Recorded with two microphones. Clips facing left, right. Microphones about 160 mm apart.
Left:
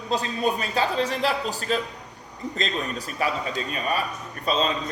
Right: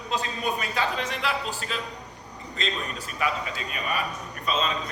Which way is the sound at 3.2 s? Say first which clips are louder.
Left 2 dB; 35° left (ahead or behind).